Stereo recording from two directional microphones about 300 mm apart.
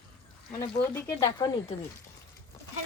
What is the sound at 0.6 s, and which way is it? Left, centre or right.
A woman's voice, centre.